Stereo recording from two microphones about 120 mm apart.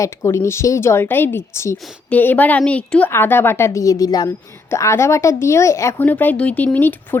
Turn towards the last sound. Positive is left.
turn(degrees=15)  # may be behind; listen again after turning